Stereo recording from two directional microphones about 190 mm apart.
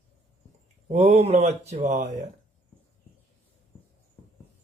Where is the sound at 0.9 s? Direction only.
35° right (ahead or behind).